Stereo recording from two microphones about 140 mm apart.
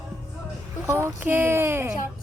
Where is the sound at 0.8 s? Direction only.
20° right (ahead or behind).